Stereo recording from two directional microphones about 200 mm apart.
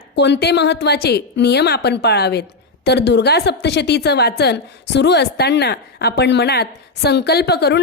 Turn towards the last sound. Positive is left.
turn(degrees=55)  # may be behind; listen again after turning